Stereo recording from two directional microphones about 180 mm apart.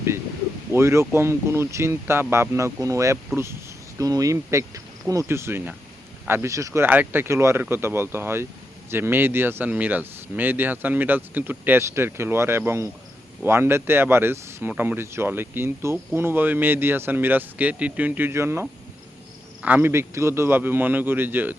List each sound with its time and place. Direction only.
0.7 s speech: 15° right (ahead or behind)
19.6 s speech: 10° right (ahead or behind)